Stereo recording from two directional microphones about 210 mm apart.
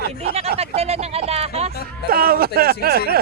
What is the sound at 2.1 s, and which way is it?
Speech, 45° right (ahead or behind).